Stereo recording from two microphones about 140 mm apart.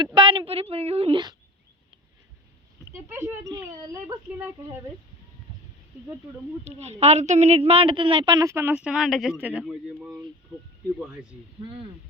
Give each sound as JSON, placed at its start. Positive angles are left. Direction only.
{"t": 0.0, "sound": "speech", "side_deg": -35}
{"t": 2.9, "sound": "speech", "side_deg": -20}
{"t": 6.7, "sound": "speech", "side_deg": -50}